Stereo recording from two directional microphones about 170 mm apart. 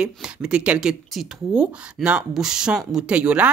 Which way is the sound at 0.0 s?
5° right (ahead or behind).